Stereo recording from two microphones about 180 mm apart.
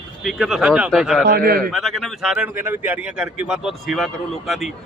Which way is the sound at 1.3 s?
55° right (ahead or behind).